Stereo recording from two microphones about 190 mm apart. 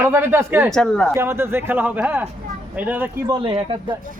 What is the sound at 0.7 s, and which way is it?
Speech, 5° left (ahead or behind).